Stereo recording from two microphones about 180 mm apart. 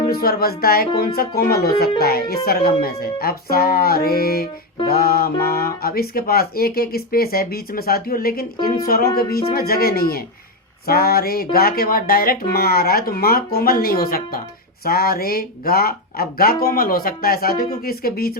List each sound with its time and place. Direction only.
0.0 s speech: 55° left (ahead or behind)